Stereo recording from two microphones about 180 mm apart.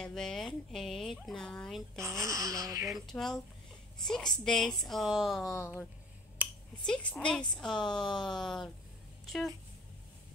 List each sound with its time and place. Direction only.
0.0 s speech: 5° left (ahead or behind)
2.0 s speech: 15° right (ahead or behind)
2.9 s speech: centre (ahead or behind)
5.6 s speech: 15° left (ahead or behind)
6.4 s a sound: 10° right (ahead or behind)
6.9 s speech: 5° left (ahead or behind)